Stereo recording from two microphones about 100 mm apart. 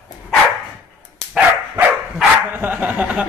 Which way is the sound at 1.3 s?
10° right (ahead or behind).